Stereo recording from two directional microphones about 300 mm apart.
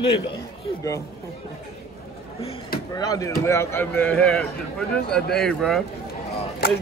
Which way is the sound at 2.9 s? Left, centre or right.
Centre.